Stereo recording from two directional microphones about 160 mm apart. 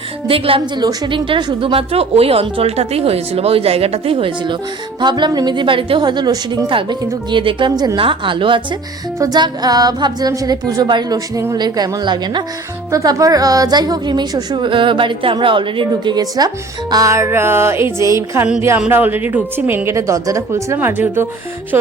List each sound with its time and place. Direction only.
0.3 s a woman's voice: 35° right (ahead or behind); by 21.2 s 10° right (ahead or behind)